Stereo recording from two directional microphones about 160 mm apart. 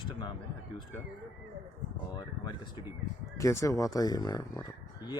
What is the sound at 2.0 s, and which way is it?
Speech, 25° left (ahead or behind).